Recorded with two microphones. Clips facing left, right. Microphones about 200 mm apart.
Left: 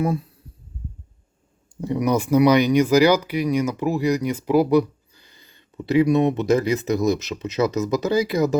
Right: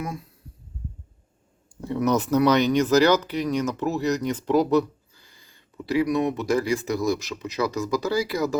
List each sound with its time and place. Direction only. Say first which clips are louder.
1.7 s speech: left 2 dB; 15° left (ahead or behind)